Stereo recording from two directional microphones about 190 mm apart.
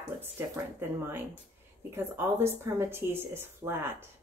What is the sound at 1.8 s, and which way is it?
Speech, 15° right (ahead or behind).